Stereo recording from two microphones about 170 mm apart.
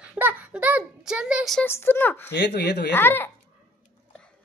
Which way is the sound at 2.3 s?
85° left.